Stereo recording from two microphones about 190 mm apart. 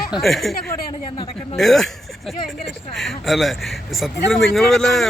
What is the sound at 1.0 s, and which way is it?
Speech, 25° left (ahead or behind).